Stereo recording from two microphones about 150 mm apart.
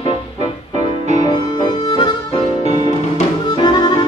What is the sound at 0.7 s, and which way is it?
Music, 50° right (ahead or behind).